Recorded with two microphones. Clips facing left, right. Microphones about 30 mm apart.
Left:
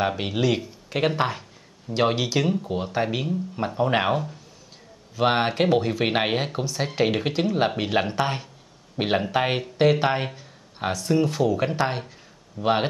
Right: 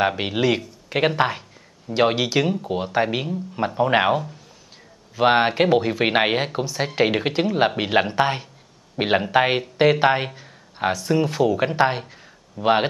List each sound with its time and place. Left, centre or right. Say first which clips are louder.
0.1 s speech: right 3 dB; centre